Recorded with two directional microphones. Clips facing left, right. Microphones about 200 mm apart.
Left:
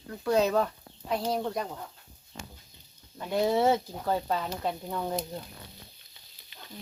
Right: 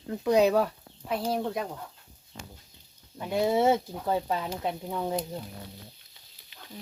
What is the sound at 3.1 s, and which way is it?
Speech, 10° right (ahead or behind).